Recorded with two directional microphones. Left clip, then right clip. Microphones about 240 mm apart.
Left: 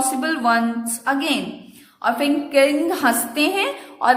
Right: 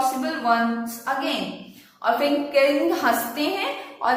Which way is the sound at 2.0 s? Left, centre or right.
Left.